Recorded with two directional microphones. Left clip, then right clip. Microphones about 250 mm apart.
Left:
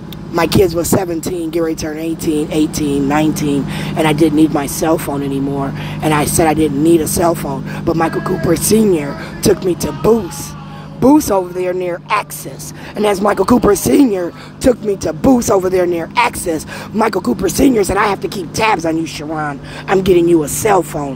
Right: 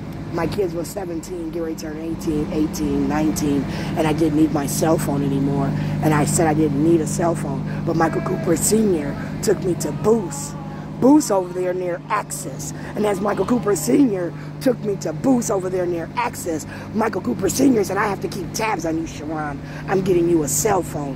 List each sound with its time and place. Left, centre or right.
0.4 s a man's voice: centre